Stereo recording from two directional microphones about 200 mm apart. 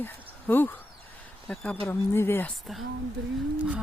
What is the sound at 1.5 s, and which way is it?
Speech, 10° left (ahead or behind).